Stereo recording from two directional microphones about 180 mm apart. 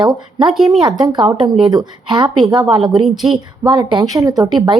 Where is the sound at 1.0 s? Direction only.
20° right (ahead or behind).